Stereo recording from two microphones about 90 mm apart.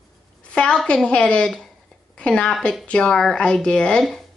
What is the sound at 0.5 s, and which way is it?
A woman's voice, 10° left (ahead or behind).